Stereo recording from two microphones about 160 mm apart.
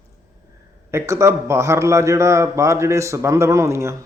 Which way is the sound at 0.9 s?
20° right (ahead or behind).